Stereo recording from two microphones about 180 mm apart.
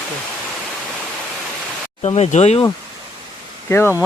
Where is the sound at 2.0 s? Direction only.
35° left (ahead or behind).